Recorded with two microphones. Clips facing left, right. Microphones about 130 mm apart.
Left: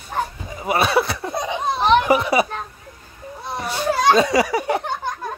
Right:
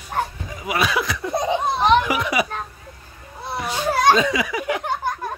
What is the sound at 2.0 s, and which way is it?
Children playing, 35° left (ahead or behind).